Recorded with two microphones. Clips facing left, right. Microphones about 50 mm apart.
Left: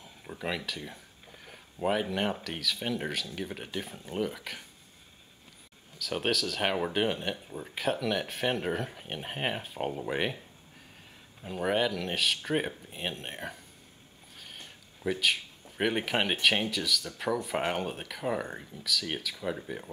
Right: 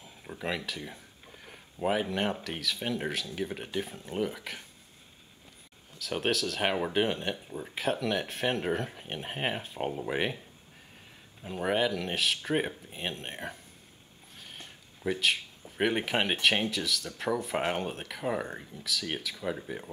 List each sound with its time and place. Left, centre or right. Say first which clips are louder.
0.0 s speech: even; centre
5.9 s speech: even; centre
11.4 s speech: even; centre